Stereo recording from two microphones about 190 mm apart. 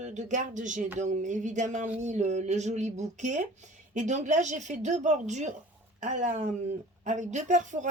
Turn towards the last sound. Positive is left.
turn(degrees=-40)  # may be behind; listen again after turning